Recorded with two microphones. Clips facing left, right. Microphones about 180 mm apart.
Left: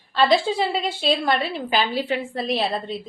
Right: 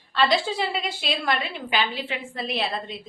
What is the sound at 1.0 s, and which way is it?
A woman's voice, 30° left (ahead or behind).